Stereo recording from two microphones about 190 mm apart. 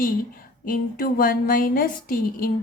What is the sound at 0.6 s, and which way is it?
A woman's voice, 45° left (ahead or behind).